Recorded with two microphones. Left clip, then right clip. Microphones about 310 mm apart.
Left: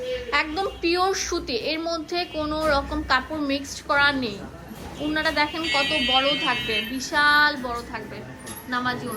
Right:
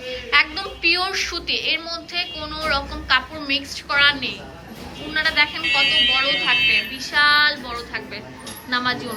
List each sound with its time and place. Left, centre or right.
0.3 s a woman's voice: centre